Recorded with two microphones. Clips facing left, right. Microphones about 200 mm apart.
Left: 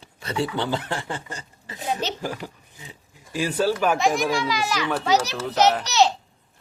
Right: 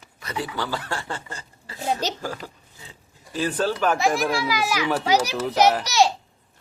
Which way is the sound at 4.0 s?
Centre (ahead or behind).